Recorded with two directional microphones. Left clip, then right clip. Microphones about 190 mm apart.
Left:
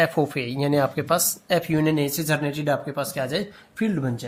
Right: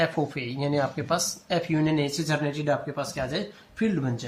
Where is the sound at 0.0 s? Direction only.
50° left (ahead or behind).